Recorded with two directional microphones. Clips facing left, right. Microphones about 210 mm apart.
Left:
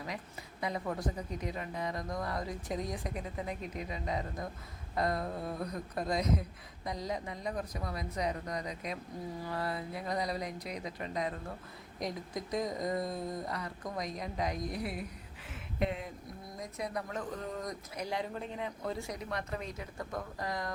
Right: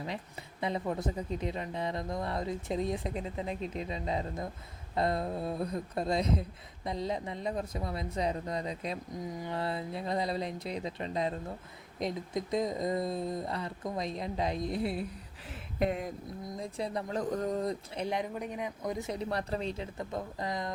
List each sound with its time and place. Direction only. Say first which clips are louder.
0.6 s a woman's voice: right 3 dB; 25° right (ahead or behind)
15.8 s speech: right 4 dB; 45° right (ahead or behind)
16.6 s speech: right 2 dB; 30° right (ahead or behind)
17.7 s a woman's voice: right 5 dB; 25° right (ahead or behind)